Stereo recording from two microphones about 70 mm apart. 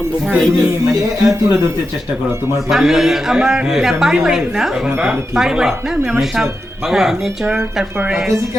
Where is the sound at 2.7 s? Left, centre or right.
Centre.